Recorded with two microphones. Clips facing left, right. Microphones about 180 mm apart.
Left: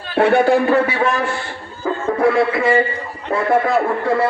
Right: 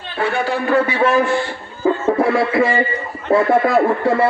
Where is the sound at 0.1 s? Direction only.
60° left (ahead or behind).